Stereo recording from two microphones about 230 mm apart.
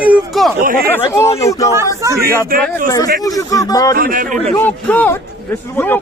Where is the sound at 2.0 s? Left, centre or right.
Centre.